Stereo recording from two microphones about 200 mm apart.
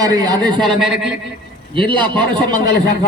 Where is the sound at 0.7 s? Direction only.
Centre (ahead or behind).